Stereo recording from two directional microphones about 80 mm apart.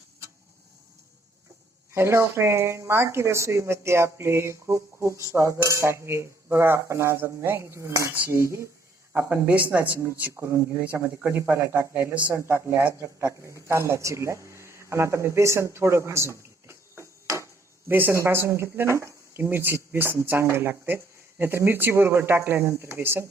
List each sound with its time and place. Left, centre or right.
1.9 s speech: right
9.1 s speech: right
10.3 s speech: right
11.7 s a woman's voice: right
17.2 s a sound: right
17.9 s speech: right
19.5 s speech: right